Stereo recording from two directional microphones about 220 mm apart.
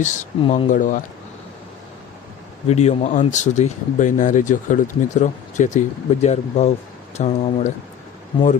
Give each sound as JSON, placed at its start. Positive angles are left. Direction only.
{"t": 0.0, "sound": "speech", "side_deg": 30}
{"t": 2.6, "sound": "speech", "side_deg": 30}